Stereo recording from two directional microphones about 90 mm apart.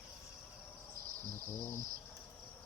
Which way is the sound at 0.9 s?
25° left (ahead or behind).